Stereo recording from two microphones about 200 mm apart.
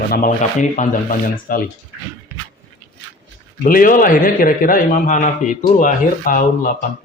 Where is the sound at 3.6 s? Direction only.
45° left (ahead or behind).